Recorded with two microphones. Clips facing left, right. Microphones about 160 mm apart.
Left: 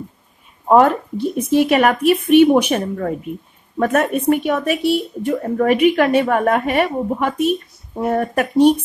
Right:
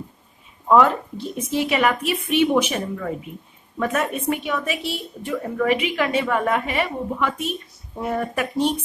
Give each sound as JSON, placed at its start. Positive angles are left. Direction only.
{"t": 0.7, "sound": "a woman's voice", "side_deg": 50}